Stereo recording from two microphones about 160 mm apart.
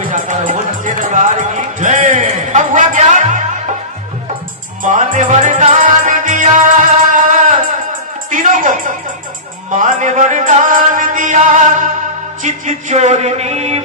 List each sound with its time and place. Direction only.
0.0 s music: 55° right (ahead or behind)
4.8 s music: 50° right (ahead or behind)
12.4 s a sound: 50° right (ahead or behind)